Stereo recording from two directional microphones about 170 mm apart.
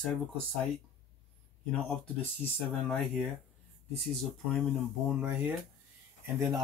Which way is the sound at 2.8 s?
Centre (ahead or behind).